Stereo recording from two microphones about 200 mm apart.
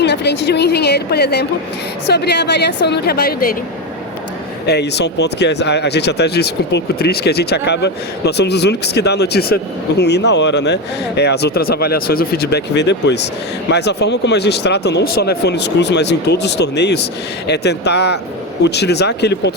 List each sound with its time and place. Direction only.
0.0 s speech: 55° left (ahead or behind)
4.6 s speech: 55° left (ahead or behind)